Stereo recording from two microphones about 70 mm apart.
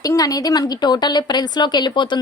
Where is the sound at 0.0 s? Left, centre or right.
Left.